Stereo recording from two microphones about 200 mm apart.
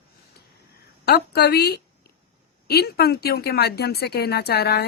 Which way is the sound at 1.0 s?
55° left (ahead or behind).